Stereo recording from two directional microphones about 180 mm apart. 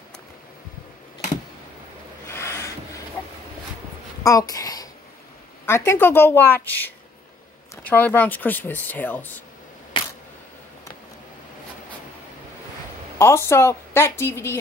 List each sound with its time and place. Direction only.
2.2 s a sound: 15° left (ahead or behind)
4.2 s a child's voice: 20° left (ahead or behind)
9.9 s camera: 30° left (ahead or behind)
13.2 s speech: 15° left (ahead or behind)